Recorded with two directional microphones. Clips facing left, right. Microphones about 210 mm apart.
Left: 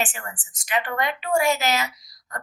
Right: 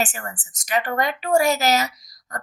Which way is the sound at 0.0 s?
40° right (ahead or behind).